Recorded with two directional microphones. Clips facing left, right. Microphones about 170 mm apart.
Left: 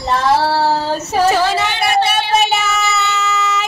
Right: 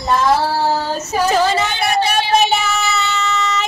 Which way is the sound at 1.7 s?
65° left (ahead or behind).